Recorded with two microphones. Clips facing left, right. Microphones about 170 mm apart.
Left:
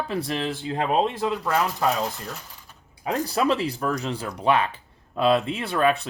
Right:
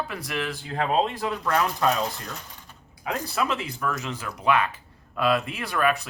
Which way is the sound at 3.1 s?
35° left (ahead or behind).